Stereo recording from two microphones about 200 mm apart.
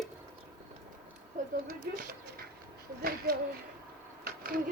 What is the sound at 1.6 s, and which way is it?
Speech, 45° right (ahead or behind).